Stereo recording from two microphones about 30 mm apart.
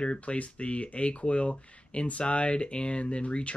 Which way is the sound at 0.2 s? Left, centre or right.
Left.